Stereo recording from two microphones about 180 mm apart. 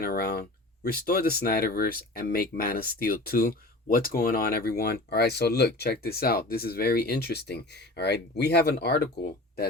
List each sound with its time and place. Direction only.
0.0 s speech: 60° left (ahead or behind)